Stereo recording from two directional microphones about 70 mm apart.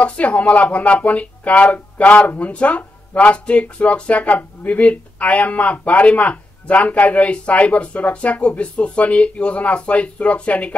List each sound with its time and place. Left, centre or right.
0.0 s speech: centre